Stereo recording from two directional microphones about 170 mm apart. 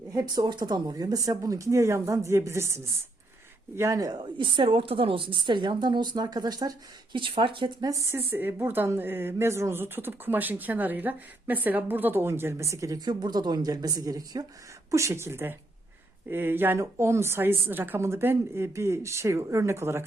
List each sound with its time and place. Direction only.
0.1 s a woman's voice: 20° right (ahead or behind)
8.1 s a woman's voice: 10° right (ahead or behind)